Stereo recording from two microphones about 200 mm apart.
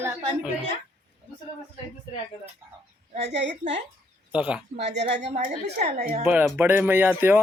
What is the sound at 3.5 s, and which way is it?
Speech, 35° right (ahead or behind).